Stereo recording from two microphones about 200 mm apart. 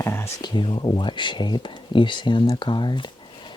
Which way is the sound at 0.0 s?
15° left (ahead or behind).